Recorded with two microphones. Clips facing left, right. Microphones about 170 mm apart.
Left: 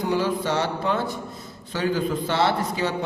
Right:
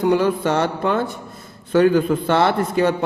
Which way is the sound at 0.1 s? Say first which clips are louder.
Right 3 dB; 55° right (ahead or behind).